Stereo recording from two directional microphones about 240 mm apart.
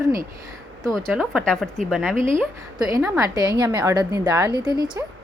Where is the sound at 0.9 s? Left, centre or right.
Centre.